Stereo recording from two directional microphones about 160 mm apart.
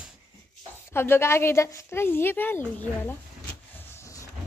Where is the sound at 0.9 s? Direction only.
15° left (ahead or behind).